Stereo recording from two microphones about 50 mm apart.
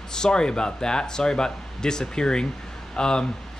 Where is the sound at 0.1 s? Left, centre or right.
Centre.